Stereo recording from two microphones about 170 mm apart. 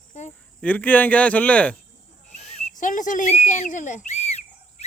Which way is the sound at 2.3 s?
40° left (ahead or behind).